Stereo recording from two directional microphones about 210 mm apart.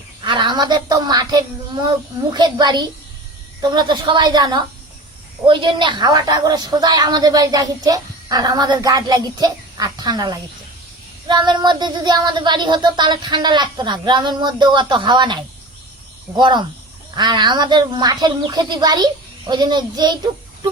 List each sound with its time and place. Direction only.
0.3 s a woman's voice: 20° right (ahead or behind)
16.4 s a woman's voice: 20° right (ahead or behind)